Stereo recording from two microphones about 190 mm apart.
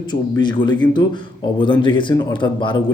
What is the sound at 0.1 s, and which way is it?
A man's voice, 25° left (ahead or behind).